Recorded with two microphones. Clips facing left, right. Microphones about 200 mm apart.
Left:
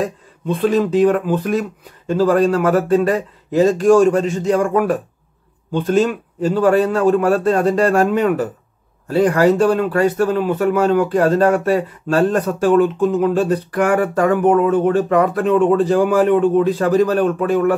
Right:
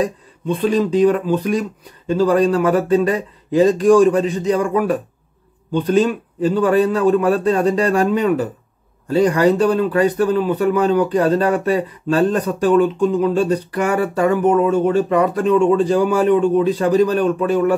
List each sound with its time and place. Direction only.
0.6 s speech: 50° left (ahead or behind)